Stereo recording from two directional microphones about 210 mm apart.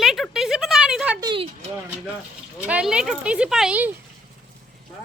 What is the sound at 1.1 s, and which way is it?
Speech, 20° right (ahead or behind).